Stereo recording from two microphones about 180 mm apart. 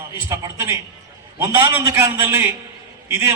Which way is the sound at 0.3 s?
15° right (ahead or behind).